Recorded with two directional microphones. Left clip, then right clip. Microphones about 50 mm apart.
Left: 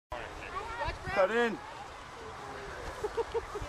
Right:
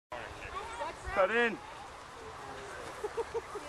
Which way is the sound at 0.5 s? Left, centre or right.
Right.